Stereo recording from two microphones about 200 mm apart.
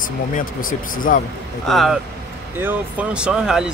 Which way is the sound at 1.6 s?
Centre (ahead or behind).